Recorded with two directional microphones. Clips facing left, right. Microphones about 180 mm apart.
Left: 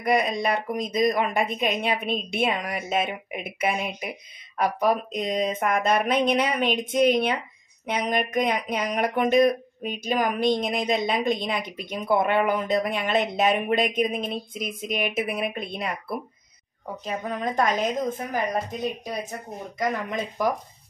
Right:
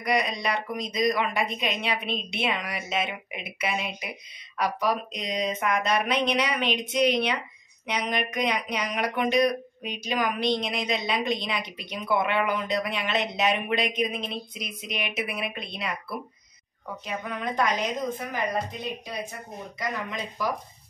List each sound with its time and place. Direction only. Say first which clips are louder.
0.0 s speech: left 4 dB; 50° left (ahead or behind)
17.0 s speech: left 4 dB; 40° left (ahead or behind)